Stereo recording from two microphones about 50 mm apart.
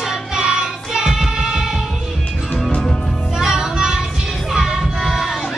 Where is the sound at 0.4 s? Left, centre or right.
Centre.